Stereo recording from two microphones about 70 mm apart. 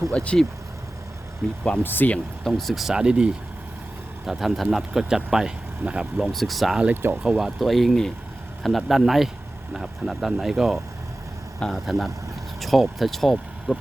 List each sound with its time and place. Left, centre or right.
0.1 s speech: centre
1.4 s speech: centre
1.8 s speech: left
2.4 s speech: centre
4.3 s speech: centre
6.1 s speech: centre
6.9 s speech: right
7.2 s speech: centre